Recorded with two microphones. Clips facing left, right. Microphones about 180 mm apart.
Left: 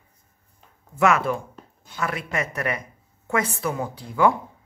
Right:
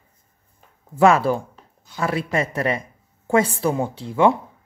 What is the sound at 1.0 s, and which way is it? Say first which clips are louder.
A woman's voice: right 5 dB; 30° right (ahead or behind).